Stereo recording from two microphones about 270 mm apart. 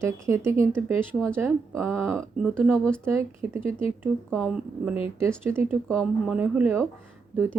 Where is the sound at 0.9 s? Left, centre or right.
Centre.